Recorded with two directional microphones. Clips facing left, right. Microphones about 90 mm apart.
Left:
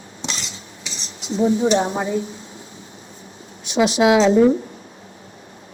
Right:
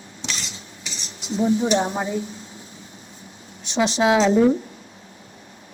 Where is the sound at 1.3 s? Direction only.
30° left (ahead or behind).